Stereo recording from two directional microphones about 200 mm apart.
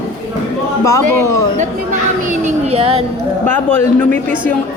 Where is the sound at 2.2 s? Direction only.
30° right (ahead or behind).